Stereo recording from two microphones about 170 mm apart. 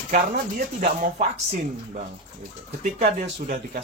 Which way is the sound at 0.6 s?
50° right (ahead or behind).